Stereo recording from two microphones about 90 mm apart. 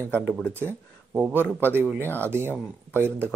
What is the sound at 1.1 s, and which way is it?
Speech, 20° right (ahead or behind).